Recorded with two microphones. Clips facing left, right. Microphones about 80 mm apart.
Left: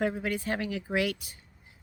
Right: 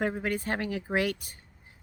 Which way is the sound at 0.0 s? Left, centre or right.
Right.